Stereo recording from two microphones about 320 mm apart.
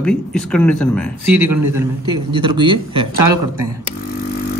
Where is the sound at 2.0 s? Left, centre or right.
Centre.